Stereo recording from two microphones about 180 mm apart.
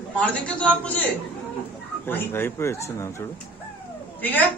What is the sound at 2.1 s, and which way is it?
A man's voice, 10° left (ahead or behind).